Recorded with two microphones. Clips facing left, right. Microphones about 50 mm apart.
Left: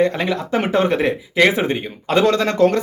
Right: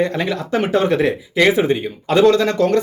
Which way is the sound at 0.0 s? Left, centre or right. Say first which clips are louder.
Left 1 dB; left.